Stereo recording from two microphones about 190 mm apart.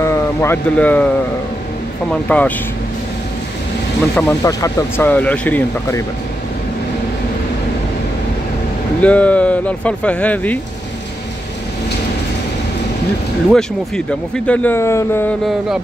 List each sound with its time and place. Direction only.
0.0 s speech: 15° left (ahead or behind)
2.2 s speech: 5° left (ahead or behind)
4.1 s speech: 10° left (ahead or behind)
9.0 s speech: 5° left (ahead or behind)
13.5 s speech: 5° left (ahead or behind)